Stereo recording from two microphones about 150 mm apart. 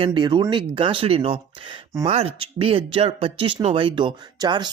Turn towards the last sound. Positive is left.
turn(degrees=-30)  # may be behind; listen again after turning